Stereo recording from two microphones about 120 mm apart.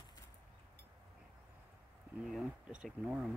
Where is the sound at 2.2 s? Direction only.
5° right (ahead or behind).